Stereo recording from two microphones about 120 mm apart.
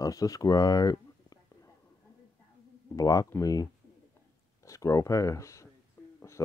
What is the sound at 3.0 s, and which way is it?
Speech, 30° left (ahead or behind).